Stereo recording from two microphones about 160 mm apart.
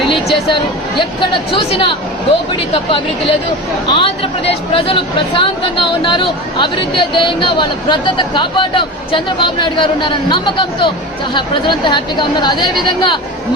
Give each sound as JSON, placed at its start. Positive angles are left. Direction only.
{"t": 0.5, "sound": "speech", "side_deg": 30}